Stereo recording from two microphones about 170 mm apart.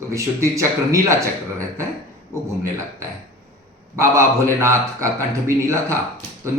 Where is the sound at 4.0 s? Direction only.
15° right (ahead or behind).